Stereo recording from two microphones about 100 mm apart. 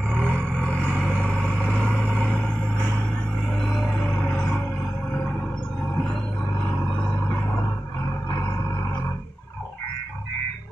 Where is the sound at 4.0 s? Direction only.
5° left (ahead or behind).